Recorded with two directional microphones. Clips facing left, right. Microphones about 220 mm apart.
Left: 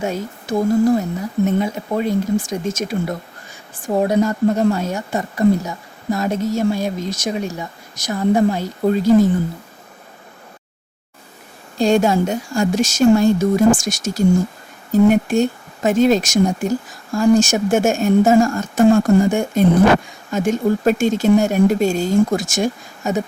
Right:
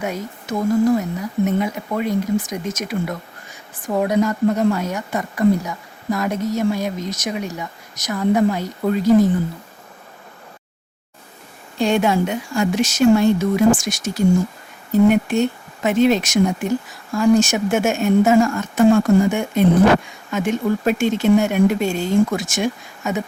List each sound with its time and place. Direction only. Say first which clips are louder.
0.0 s a woman's voice: left 3 dB; 30° left (ahead or behind)
11.8 s speech: left 2 dB; 45° left (ahead or behind)